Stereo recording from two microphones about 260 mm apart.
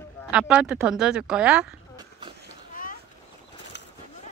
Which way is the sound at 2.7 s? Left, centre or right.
Left.